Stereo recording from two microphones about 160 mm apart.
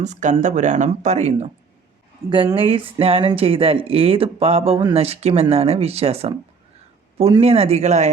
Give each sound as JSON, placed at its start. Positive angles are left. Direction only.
{"t": 0.0, "sound": "speech", "side_deg": -50}
{"t": 2.3, "sound": "speech", "side_deg": -30}